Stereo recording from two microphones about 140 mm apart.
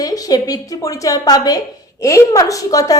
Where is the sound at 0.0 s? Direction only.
25° left (ahead or behind).